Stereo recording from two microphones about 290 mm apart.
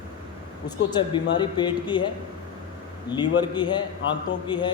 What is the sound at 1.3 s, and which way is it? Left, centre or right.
A man's voice, centre.